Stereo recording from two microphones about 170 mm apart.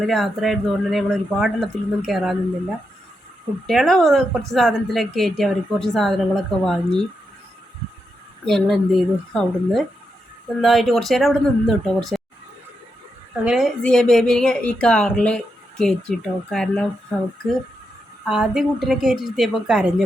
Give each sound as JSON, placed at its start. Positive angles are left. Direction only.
{"t": 0.0, "sound": "a woman's voice", "side_deg": 0}
{"t": 8.4, "sound": "a woman's voice", "side_deg": 0}
{"t": 13.4, "sound": "a woman's voice", "side_deg": -5}
{"t": 18.3, "sound": "a woman's voice", "side_deg": -5}